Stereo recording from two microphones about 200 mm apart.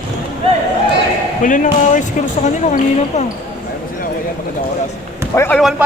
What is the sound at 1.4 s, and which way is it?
Speech, 40° left (ahead or behind).